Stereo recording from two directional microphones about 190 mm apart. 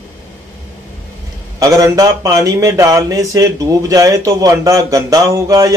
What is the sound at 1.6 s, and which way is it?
Speech, 20° right (ahead or behind).